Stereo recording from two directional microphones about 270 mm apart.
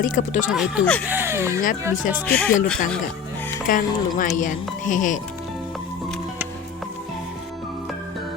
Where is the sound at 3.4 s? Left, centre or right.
Centre.